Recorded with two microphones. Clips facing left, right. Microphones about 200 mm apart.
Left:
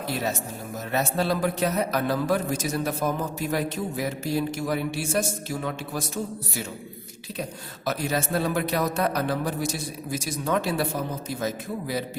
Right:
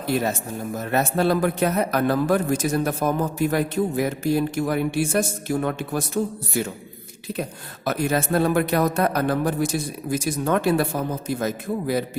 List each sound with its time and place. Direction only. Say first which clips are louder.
0.8 s a man's voice: right 4 dB; 55° right (ahead or behind)
7.9 s a man's voice: right 4 dB; 55° right (ahead or behind)